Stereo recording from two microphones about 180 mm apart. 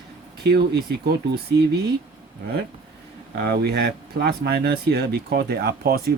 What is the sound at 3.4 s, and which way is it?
Speech, 60° right (ahead or behind).